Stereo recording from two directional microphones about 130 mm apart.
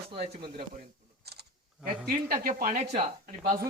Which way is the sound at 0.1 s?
40° right (ahead or behind).